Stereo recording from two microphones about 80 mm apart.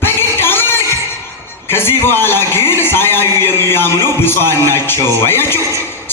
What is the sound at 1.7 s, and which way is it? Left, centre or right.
A woman's voice, left.